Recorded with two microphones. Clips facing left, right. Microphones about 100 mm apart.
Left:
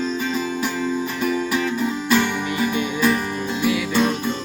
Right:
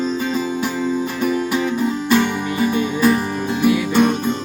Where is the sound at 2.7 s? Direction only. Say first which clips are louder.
Right 5 dB; 35° right (ahead or behind).